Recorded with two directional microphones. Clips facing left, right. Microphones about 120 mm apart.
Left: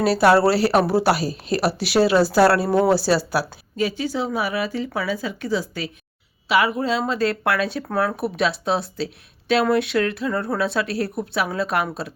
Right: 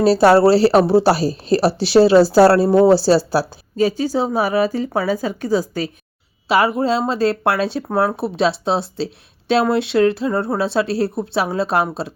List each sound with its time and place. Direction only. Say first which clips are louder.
0.0 s a woman's voice: right 4 dB; 30° right (ahead or behind)